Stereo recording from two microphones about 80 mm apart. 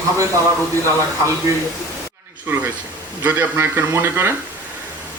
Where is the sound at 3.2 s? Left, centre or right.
Right.